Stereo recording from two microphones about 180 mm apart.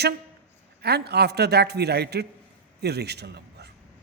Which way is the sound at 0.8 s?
65° right (ahead or behind).